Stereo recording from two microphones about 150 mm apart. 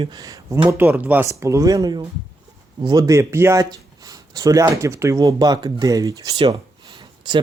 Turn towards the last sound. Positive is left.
turn(degrees=-30)  # may be behind; listen again after turning